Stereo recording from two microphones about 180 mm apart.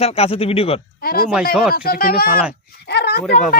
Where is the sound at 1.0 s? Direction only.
55° left (ahead or behind).